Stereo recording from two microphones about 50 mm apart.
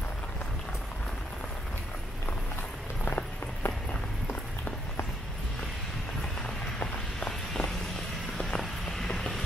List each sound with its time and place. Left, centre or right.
3.1 s a sound: left
6.8 s walk: centre
8.4 s vehicle: centre
9.1 s mechanisms: centre